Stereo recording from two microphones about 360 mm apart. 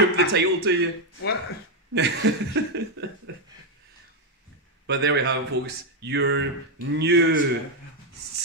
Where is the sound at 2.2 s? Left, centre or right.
Right.